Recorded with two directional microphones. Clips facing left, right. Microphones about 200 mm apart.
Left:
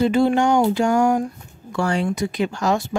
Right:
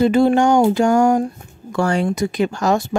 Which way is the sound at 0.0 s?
45° right (ahead or behind).